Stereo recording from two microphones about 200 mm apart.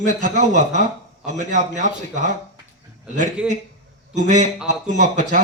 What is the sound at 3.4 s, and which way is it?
Speech, 5° right (ahead or behind).